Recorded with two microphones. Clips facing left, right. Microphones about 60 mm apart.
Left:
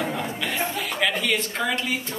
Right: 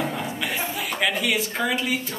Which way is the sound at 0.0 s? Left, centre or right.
Centre.